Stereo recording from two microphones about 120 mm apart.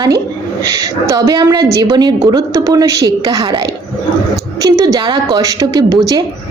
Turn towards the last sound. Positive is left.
turn(degrees=-30)  # may be behind; listen again after turning